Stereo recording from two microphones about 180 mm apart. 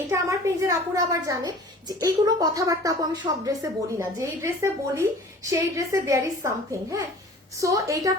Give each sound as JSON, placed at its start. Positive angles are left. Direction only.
{"t": 0.1, "sound": "a woman's voice", "side_deg": -15}